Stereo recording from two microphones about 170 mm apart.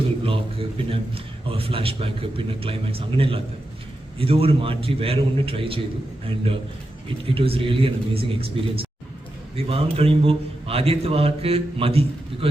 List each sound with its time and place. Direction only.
0.2 s a man's voice: 35° right (ahead or behind)